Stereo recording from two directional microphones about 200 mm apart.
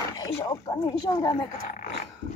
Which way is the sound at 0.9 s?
20° left (ahead or behind).